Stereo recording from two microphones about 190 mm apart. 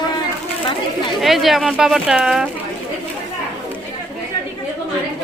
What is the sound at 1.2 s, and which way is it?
Speech, centre (ahead or behind).